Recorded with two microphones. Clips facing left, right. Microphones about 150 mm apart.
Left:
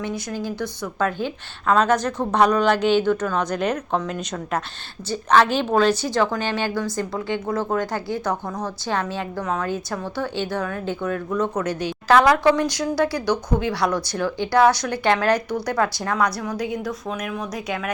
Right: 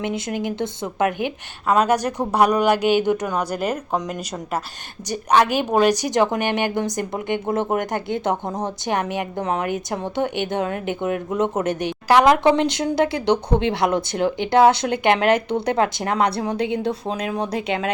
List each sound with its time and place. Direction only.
0.0 s a woman's voice: 20° right (ahead or behind)
5.0 s speech: 15° right (ahead or behind)